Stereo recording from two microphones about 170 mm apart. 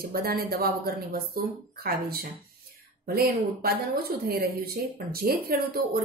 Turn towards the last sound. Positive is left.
turn(degrees=-60)  # may be behind; listen again after turning